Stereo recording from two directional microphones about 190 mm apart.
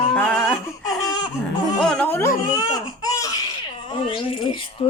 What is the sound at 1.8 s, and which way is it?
Speech, 5° left (ahead or behind).